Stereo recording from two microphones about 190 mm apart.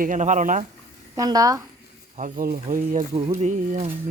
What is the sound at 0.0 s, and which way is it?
Speech, 40° right (ahead or behind).